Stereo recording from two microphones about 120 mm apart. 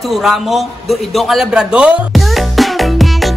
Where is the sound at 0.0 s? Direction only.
Centre (ahead or behind).